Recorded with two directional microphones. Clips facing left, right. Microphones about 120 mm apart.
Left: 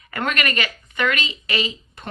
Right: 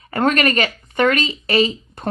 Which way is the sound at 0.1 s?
35° right (ahead or behind).